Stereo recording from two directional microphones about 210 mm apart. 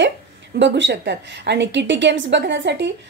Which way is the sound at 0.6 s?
60° right (ahead or behind).